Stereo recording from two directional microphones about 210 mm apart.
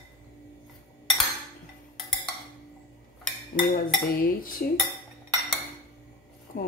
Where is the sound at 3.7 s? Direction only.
40° left (ahead or behind).